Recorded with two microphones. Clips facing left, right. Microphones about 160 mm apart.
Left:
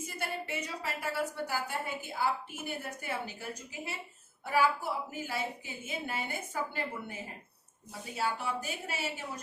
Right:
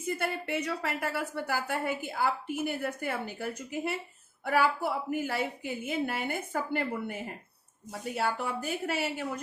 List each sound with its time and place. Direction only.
0.0 s speech: 60° right (ahead or behind)